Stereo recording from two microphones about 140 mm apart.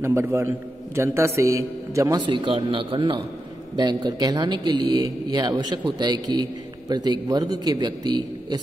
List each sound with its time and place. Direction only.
0.0 s a man's voice: 20° right (ahead or behind)